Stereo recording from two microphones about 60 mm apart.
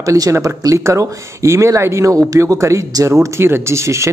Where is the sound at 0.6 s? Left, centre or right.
Right.